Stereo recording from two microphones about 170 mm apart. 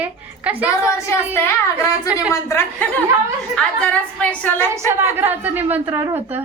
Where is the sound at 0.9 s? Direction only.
15° left (ahead or behind).